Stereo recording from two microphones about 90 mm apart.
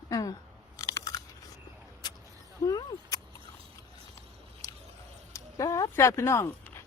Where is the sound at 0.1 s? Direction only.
40° left (ahead or behind).